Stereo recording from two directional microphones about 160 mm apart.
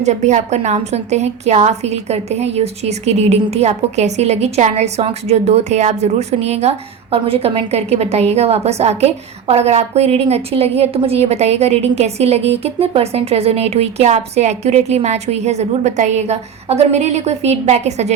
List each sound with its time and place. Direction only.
0.0 s a woman's voice: 45° right (ahead or behind)